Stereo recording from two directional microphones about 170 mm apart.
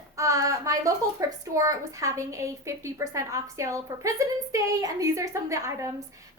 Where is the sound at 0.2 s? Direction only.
20° right (ahead or behind).